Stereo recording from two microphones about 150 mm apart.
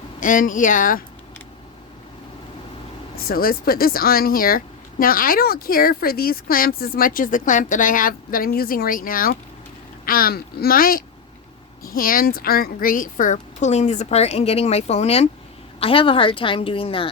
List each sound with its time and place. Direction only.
0.2 s speech: 65° left (ahead or behind)
3.2 s a woman's voice: 80° left; by 17.1 s 35° left (ahead or behind)